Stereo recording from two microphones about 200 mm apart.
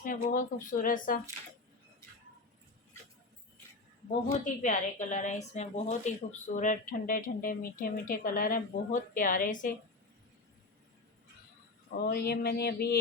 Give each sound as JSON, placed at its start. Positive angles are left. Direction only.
{"t": 0.0, "sound": "a woman's voice", "side_deg": 40}
{"t": 4.4, "sound": "a woman's voice", "side_deg": 40}
{"t": 12.0, "sound": "a woman's voice", "side_deg": 50}